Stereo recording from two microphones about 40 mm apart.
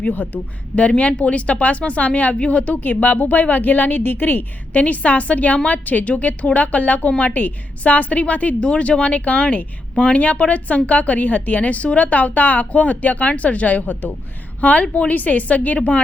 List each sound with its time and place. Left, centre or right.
0.8 s a woman's voice: left
4.7 s speech: left
8.6 s speech: left